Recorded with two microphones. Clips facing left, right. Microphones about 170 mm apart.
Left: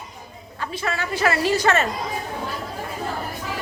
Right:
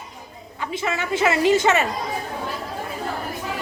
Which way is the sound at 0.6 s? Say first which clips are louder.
Right 1 dB; 20° right (ahead or behind).